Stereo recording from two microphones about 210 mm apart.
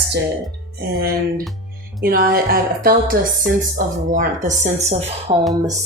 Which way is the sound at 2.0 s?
45° right (ahead or behind).